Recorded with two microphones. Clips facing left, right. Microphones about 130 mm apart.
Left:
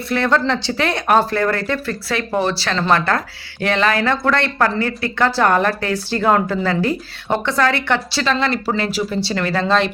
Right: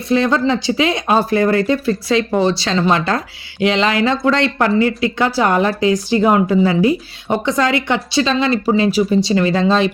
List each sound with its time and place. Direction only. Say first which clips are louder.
0.1 s a woman's voice: right 3 dB; 15° right (ahead or behind)